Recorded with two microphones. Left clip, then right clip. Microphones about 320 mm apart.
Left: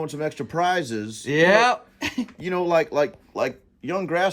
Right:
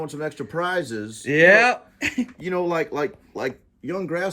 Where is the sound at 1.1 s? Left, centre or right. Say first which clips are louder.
Right 3 dB; centre.